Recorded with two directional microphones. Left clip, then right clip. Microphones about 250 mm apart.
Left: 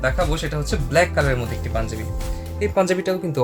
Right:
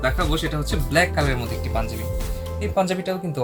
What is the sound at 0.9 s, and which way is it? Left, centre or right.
Speech, left.